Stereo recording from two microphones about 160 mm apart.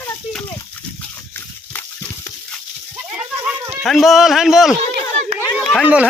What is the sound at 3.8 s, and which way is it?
Speech, centre (ahead or behind).